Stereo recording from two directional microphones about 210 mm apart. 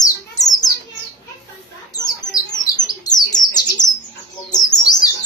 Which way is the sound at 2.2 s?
60° left (ahead or behind).